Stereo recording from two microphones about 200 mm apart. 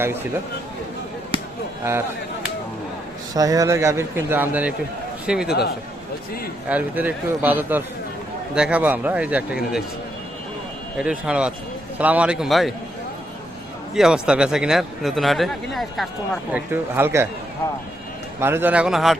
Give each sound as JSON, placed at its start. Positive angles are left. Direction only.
{"t": 1.3, "sound": "chop", "side_deg": -25}
{"t": 3.3, "sound": "a man's voice", "side_deg": -20}
{"t": 5.5, "sound": "a man's voice", "side_deg": 55}
{"t": 6.7, "sound": "speech", "side_deg": -10}
{"t": 10.9, "sound": "speech", "side_deg": -5}
{"t": 13.9, "sound": "speech", "side_deg": -5}
{"t": 18.3, "sound": "speech", "side_deg": -10}